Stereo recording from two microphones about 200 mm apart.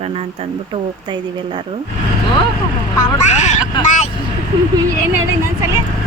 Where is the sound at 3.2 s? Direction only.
35° left (ahead or behind).